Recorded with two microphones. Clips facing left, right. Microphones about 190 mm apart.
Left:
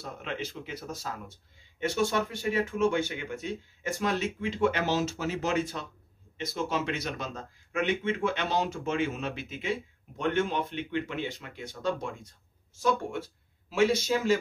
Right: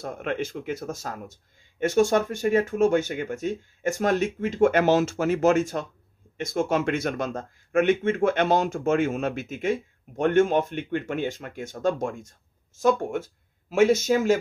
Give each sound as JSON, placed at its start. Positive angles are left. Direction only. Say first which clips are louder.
{"t": 0.0, "sound": "speech", "louder": "right 7 dB", "side_deg": -50}